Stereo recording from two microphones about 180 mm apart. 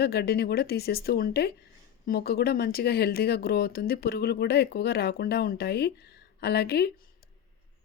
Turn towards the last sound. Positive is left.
turn(degrees=65)  # may be behind; listen again after turning